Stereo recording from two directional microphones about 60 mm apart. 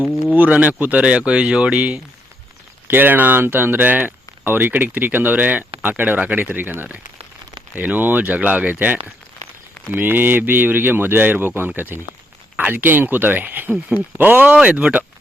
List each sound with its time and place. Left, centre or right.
0.3 s speech: right
2.8 s speech: right
14.5 s speech: right